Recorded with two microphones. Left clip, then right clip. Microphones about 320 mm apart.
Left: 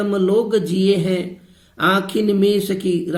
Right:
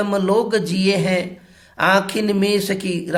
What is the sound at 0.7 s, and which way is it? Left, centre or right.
Speech, right.